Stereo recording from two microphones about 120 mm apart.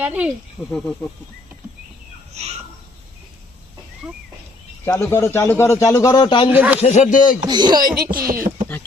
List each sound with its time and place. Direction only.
0.0 s speech: 10° right (ahead or behind)
0.7 s speech: 5° left (ahead or behind)
2.3 s a sound: 65° right (ahead or behind)
4.0 s a sound: 5° right (ahead or behind)
4.9 s a man's voice: 20° left (ahead or behind); by 6.5 s 40° left (ahead or behind)
6.5 s speech: 10° right (ahead or behind)
6.8 s speech: 85° left
7.4 s speech: 35° right (ahead or behind)